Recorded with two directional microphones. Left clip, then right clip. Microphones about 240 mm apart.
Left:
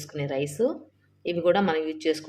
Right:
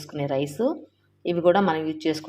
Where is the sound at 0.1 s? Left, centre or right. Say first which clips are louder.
Right 3 dB; centre.